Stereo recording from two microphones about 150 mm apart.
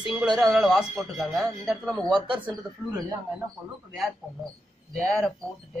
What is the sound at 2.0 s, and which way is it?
Speech, 30° right (ahead or behind).